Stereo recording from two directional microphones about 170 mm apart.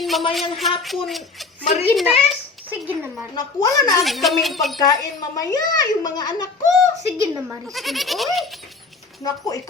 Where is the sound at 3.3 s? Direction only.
25° left (ahead or behind).